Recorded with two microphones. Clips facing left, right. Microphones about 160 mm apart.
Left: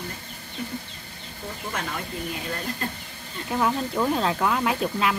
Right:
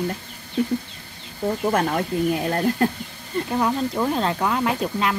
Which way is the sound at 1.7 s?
55° right (ahead or behind).